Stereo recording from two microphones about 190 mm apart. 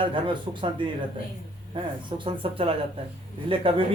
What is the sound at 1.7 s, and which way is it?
A man's voice, 25° right (ahead or behind).